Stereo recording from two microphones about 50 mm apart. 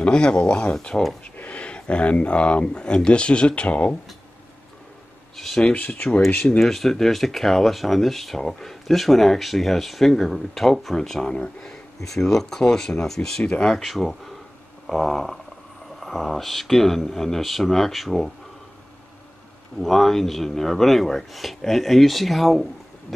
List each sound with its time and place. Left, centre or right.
0.0 s speech: centre
1.3 s speech: left
5.3 s a sound: centre
5.8 s speech: left
6.6 s speech: centre
13.4 s speech: centre
13.7 s speech: centre
19.8 s speech: centre